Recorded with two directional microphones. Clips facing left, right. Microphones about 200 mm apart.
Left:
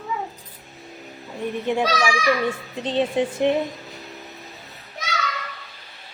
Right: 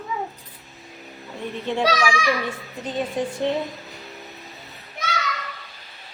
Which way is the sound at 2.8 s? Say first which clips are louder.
Left 4 dB; 30° left (ahead or behind).